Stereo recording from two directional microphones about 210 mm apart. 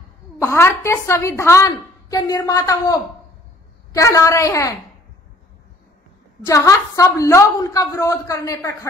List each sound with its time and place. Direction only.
0.4 s a woman's voice: 10° left (ahead or behind)
6.4 s a woman's voice: 15° left (ahead or behind)